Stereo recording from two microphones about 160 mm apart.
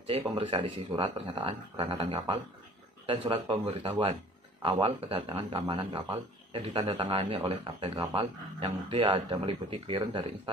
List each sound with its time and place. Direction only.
0.4 s speech: 35° right (ahead or behind)